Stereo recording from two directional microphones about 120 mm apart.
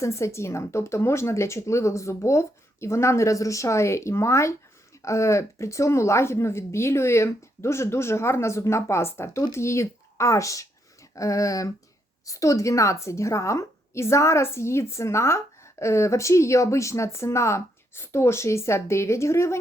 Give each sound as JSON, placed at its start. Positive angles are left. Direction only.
{"t": 0.0, "sound": "speech", "side_deg": 25}